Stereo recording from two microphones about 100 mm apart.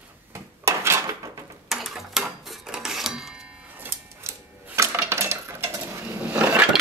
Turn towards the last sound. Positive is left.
turn(degrees=-15)  # may be behind; listen again after turning